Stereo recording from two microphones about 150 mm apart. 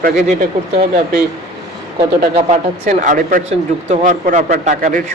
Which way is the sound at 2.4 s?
50° right (ahead or behind).